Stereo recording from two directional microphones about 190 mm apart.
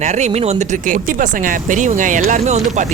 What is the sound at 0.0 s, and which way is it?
Speech, 40° right (ahead or behind).